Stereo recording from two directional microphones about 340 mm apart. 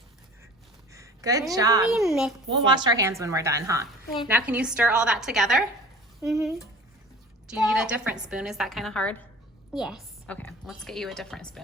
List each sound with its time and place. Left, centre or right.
0.9 s a woman's voice: centre
2.6 s a woman's voice: centre
7.5 s a woman's voice: centre